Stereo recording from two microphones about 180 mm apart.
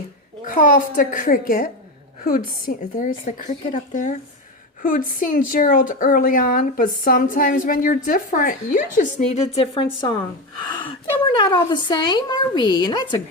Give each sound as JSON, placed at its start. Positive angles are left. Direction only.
{"t": 0.4, "sound": "a woman's voice", "side_deg": 45}